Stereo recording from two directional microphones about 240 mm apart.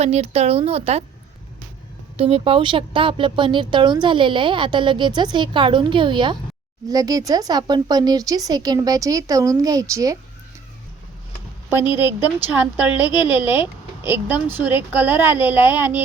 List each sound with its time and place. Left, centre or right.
0.0 s speech: right
2.1 s speech: right
11.8 s speech: centre